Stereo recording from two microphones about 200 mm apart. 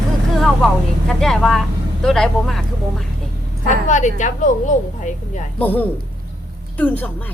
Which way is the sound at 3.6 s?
40° left (ahead or behind).